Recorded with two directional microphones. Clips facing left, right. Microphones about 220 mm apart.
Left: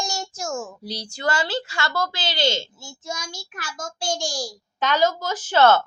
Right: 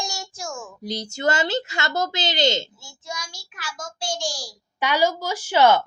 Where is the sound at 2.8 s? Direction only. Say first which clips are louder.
Left 2 dB; 45° left (ahead or behind).